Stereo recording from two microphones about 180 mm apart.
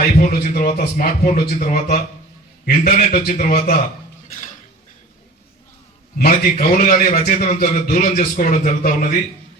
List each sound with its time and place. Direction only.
0.2 s speech: 50° left (ahead or behind)
6.1 s a man's voice: 50° left (ahead or behind)